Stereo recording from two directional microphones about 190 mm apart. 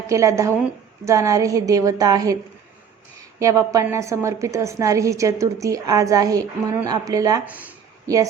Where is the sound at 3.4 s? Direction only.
15° right (ahead or behind).